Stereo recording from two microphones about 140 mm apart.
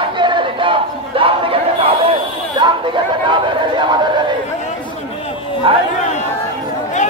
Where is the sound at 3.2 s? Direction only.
35° right (ahead or behind).